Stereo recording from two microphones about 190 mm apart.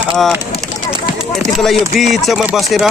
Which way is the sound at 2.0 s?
Centre (ahead or behind).